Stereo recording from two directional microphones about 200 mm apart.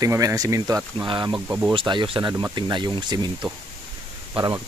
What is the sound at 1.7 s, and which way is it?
Speech, 25° right (ahead or behind).